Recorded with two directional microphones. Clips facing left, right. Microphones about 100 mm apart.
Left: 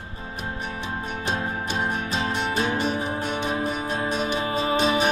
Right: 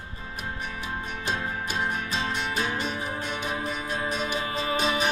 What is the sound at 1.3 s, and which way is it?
Music, 25° left (ahead or behind).